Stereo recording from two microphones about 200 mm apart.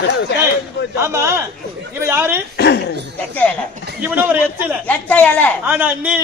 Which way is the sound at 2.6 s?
55° left (ahead or behind).